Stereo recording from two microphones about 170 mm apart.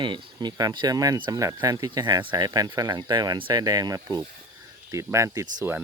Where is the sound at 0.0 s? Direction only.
25° right (ahead or behind).